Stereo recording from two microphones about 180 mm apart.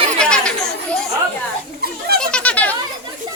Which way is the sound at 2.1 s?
5° left (ahead or behind).